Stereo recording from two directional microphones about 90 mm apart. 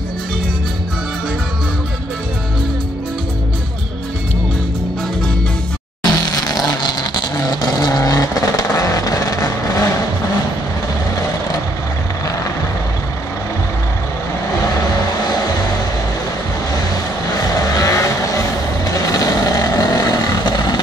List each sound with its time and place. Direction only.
6.0 s vehicle: 45° left (ahead or behind)
17.3 s vehicle: 45° left (ahead or behind)